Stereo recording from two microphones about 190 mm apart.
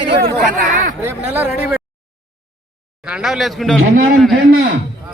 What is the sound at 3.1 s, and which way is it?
Speech, 5° right (ahead or behind).